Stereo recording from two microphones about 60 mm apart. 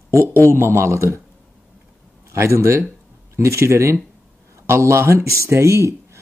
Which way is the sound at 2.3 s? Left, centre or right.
Right.